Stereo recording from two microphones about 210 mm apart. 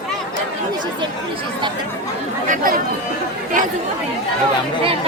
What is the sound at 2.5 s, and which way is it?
Speech, 40° right (ahead or behind).